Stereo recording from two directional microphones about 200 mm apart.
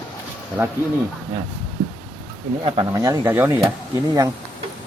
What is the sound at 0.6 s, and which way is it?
Speech, 10° right (ahead or behind).